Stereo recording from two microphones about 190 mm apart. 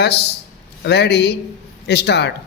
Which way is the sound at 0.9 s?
60° left (ahead or behind).